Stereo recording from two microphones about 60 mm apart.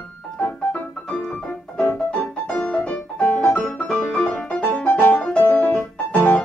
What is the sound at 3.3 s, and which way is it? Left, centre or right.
Piano, left.